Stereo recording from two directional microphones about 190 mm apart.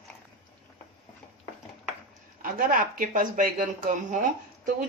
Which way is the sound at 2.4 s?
45° right (ahead or behind).